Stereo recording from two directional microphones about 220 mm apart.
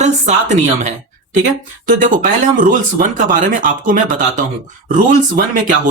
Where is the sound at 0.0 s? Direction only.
30° right (ahead or behind).